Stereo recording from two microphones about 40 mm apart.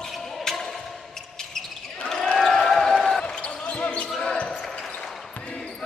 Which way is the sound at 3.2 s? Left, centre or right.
Left.